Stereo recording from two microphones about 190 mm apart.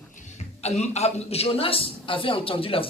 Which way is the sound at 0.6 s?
35° left (ahead or behind).